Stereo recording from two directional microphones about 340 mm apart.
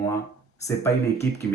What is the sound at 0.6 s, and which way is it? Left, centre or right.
Speech, centre.